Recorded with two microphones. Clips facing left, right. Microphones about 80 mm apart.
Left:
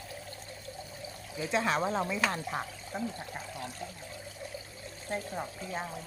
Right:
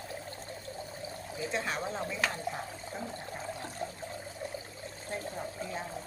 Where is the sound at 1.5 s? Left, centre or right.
Left.